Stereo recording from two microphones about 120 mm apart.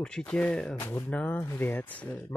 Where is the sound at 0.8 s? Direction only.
20° left (ahead or behind).